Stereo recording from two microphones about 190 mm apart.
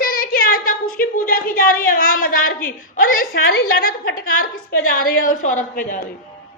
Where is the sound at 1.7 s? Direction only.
45° left (ahead or behind).